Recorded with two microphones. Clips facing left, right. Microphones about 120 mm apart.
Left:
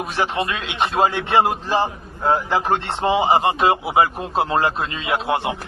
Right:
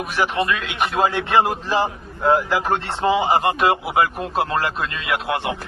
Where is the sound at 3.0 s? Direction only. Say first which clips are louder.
Left 1 dB; 25° left (ahead or behind).